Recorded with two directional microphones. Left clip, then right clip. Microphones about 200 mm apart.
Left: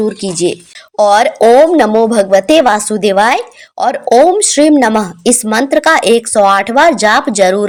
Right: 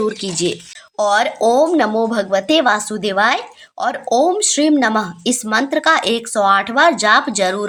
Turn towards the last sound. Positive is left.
turn(degrees=30)  # may be behind; listen again after turning